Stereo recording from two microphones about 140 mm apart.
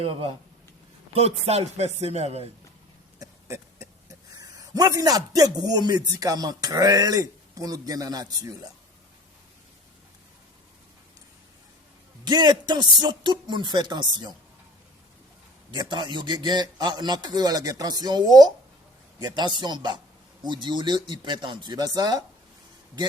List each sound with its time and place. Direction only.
0.0 s a man's voice: 40° right (ahead or behind)
3.2 s a sound: 20° right (ahead or behind)
4.4 s a man's voice: 25° right (ahead or behind)
12.2 s a man's voice: 30° right (ahead or behind)
15.7 s a man's voice: 30° right (ahead or behind)